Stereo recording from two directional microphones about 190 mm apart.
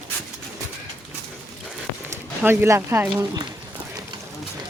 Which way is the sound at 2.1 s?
10° right (ahead or behind).